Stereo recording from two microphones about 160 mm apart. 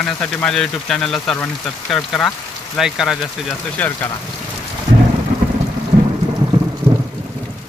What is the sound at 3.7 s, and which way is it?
Speech, 10° left (ahead or behind).